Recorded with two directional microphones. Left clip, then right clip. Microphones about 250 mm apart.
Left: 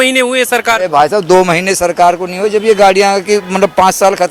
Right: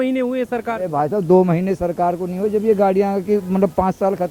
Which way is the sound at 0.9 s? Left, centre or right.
Centre.